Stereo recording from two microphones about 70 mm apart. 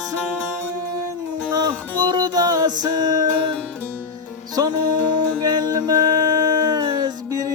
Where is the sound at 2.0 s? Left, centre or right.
Right.